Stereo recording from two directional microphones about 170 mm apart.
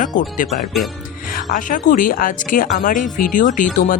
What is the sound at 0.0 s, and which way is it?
Speech, 50° left (ahead or behind).